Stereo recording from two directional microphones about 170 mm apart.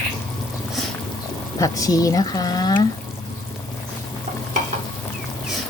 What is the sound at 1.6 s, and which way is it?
Speech, 20° left (ahead or behind).